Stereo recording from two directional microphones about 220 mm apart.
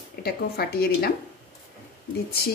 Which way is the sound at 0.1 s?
45° left (ahead or behind).